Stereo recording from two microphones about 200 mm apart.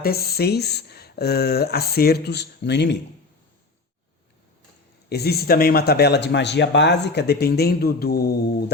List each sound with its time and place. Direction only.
0.0 s speech: 50° left (ahead or behind)
5.0 s speech: 55° left (ahead or behind)